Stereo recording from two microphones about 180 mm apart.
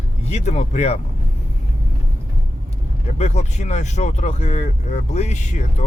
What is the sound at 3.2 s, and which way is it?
Speech, 40° left (ahead or behind).